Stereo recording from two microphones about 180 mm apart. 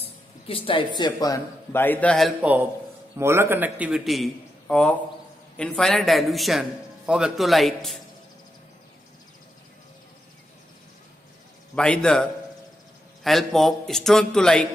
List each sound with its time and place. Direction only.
0.0 s a man's voice: 30° left (ahead or behind); by 8.0 s centre (ahead or behind)
11.7 s a man's voice: 5° left (ahead or behind)